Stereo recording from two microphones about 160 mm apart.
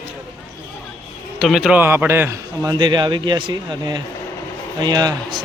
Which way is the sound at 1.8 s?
15° right (ahead or behind).